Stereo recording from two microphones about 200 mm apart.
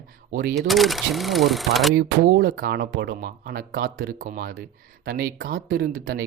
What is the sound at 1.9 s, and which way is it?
Speech, 55° right (ahead or behind).